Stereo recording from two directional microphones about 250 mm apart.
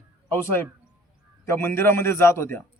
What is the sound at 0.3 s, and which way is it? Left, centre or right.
A man's voice, centre.